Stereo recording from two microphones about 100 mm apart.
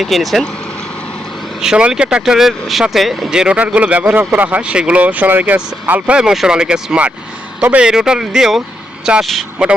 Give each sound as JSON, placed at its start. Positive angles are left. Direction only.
{"t": 0.0, "sound": "speech", "side_deg": 0}
{"t": 1.6, "sound": "speech", "side_deg": -10}